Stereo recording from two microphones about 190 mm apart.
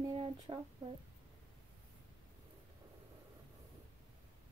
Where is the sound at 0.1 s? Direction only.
30° right (ahead or behind).